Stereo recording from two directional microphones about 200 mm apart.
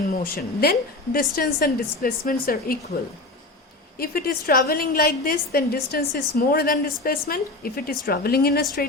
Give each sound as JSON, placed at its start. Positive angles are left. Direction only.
{"t": 0.2, "sound": "a woman's voice", "side_deg": 50}
{"t": 3.9, "sound": "a woman's voice", "side_deg": 50}